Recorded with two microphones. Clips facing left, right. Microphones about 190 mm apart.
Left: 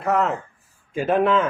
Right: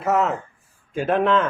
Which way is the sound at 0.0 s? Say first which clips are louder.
Right 1 dB; centre (ahead or behind).